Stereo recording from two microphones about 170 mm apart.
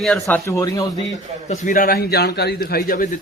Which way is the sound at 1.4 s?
45° left (ahead or behind).